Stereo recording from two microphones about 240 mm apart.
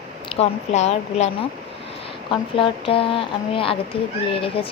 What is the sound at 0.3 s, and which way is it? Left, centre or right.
Speech, left.